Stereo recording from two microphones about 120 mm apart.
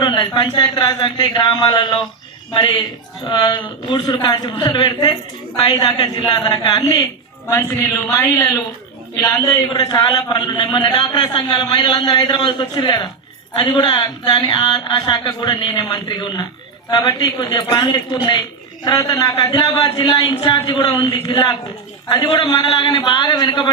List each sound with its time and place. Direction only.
0.0 s a man's voice: 40° left (ahead or behind)